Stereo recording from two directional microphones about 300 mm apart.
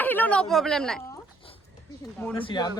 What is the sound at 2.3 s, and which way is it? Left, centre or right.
Speech, centre.